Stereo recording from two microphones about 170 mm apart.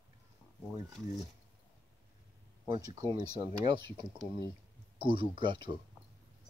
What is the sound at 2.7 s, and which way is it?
Speech, 20° right (ahead or behind).